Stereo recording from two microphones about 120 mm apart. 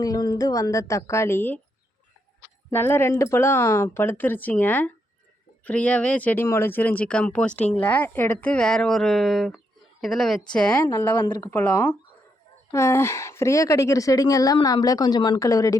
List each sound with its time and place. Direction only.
0.0 s a woman's voice: 30° left (ahead or behind)
2.6 s a woman's voice: 20° left (ahead or behind)
11.5 s a woman's voice: 20° left (ahead or behind)